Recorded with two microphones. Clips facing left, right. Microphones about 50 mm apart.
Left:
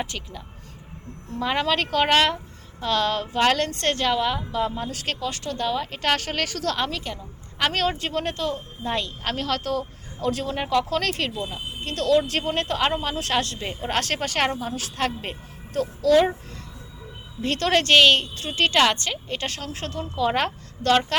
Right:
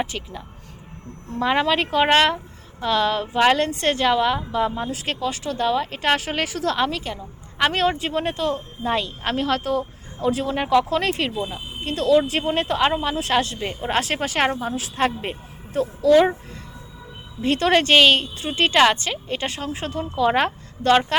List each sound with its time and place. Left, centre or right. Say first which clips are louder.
0.0 s a woman's voice: right 4 dB; centre
17.4 s a woman's voice: right 3 dB; centre